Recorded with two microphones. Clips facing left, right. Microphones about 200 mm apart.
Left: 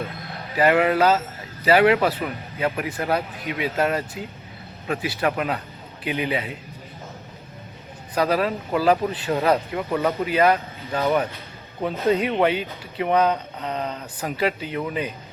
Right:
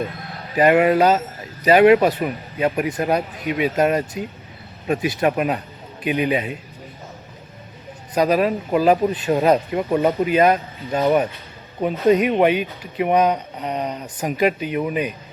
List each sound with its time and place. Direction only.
0.5 s a man's voice: 20° right (ahead or behind)
8.1 s speech: 15° right (ahead or behind)